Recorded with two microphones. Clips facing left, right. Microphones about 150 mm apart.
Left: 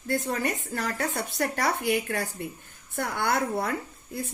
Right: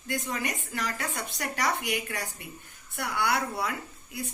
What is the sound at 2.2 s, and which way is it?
Speech, 60° left (ahead or behind).